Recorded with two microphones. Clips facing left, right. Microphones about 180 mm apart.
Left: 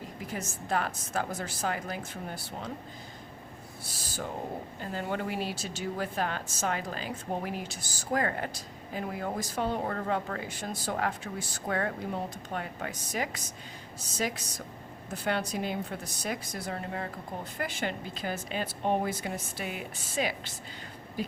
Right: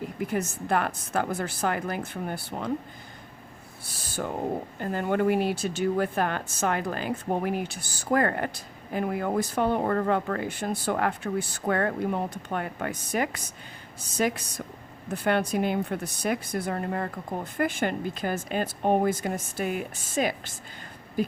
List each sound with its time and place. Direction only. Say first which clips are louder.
0.2 s speech: right 9 dB; 60° right (ahead or behind)
4.8 s speech: right 8 dB; 55° right (ahead or behind)
21.2 s a sound: right 7 dB; 50° right (ahead or behind)